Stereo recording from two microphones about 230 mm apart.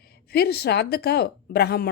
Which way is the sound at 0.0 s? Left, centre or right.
Left.